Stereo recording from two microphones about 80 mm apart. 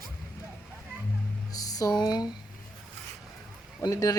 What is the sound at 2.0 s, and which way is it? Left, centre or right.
Speech, left.